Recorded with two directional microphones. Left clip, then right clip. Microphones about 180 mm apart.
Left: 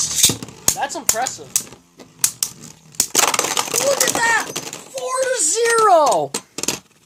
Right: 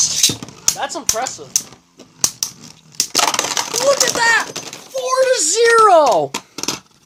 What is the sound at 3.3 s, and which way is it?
Typewriter, 10° right (ahead or behind).